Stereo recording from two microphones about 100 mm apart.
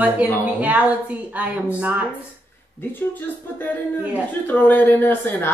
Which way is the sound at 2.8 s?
20° left (ahead or behind).